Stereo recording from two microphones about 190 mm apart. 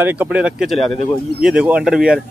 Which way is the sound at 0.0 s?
10° right (ahead or behind).